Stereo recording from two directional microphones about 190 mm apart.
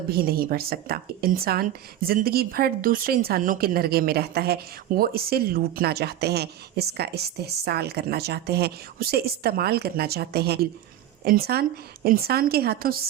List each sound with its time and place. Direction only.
0.1 s a woman's voice: 55° right (ahead or behind)